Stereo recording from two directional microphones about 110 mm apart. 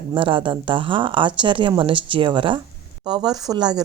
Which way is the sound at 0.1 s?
50° right (ahead or behind).